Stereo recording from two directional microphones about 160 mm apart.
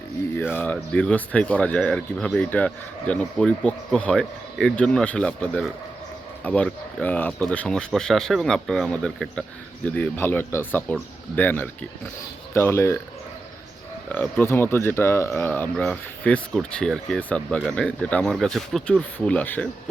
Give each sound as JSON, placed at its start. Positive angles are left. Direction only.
{"t": 0.3, "sound": "speech", "side_deg": 10}
{"t": 14.1, "sound": "speech", "side_deg": 15}